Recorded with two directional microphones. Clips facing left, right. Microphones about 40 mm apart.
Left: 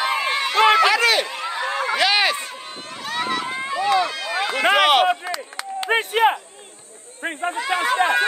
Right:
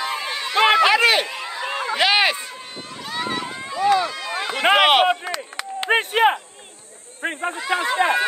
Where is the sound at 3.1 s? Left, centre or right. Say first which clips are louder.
Left 2 dB; left.